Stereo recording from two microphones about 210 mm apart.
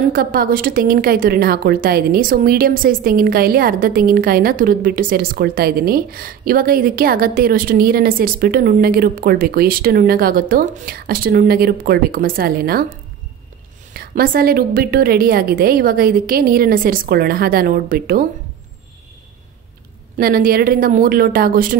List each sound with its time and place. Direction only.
0.1 s speech: 45° right (ahead or behind)
20.2 s speech: 45° right (ahead or behind)